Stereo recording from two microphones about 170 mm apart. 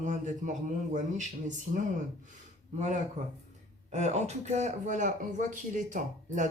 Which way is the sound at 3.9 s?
40° right (ahead or behind).